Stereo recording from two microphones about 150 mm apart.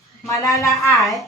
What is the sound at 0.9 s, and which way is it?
Speech, centre (ahead or behind).